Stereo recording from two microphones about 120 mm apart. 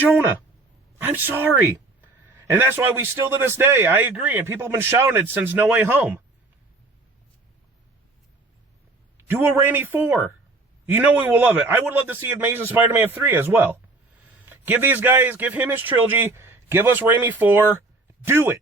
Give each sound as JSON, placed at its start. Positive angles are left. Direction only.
{"t": 1.0, "sound": "a man's voice", "side_deg": -15}
{"t": 4.4, "sound": "a man's voice", "side_deg": -20}
{"t": 9.2, "sound": "a man's voice", "side_deg": -20}